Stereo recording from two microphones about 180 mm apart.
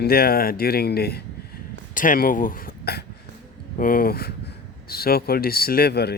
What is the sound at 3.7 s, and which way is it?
Speech, 50° left (ahead or behind).